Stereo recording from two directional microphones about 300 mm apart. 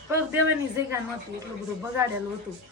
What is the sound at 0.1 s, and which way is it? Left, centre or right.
Speech, centre.